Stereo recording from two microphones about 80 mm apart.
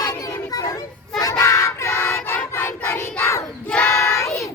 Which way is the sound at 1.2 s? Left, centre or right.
Left.